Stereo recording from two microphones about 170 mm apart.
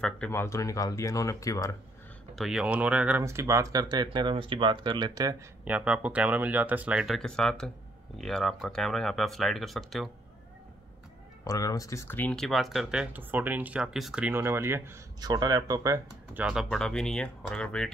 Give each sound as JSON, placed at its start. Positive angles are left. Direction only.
{"t": 0.3, "sound": "speech", "side_deg": 15}
{"t": 2.3, "sound": "speech", "side_deg": 0}
{"t": 5.7, "sound": "speech", "side_deg": -5}
{"t": 11.4, "sound": "speech", "side_deg": 20}
{"t": 16.6, "sound": "speech", "side_deg": 5}